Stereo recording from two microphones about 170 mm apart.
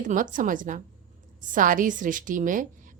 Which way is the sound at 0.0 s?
50° right (ahead or behind).